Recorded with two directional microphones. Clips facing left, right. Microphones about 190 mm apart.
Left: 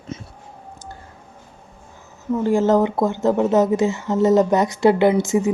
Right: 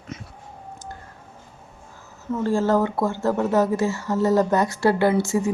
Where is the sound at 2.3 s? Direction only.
15° left (ahead or behind).